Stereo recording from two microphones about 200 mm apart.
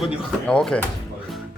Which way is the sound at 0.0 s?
Centre (ahead or behind).